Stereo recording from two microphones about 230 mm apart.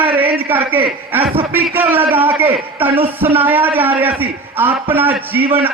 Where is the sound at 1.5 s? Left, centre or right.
Centre.